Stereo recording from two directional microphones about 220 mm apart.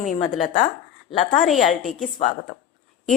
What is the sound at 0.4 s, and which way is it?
Speech, 35° left (ahead or behind).